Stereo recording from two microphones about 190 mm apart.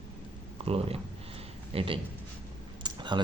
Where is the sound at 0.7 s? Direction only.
30° right (ahead or behind).